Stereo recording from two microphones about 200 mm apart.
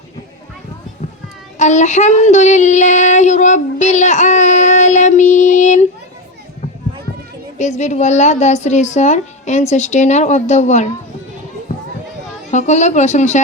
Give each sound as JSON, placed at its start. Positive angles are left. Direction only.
{"t": 1.5, "sound": "child singing", "side_deg": 35}
{"t": 7.6, "sound": "a woman's voice", "side_deg": 35}
{"t": 12.5, "sound": "a woman's voice", "side_deg": 35}